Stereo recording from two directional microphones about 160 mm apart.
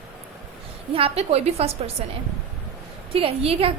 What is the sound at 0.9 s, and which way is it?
A woman's voice, 40° right (ahead or behind).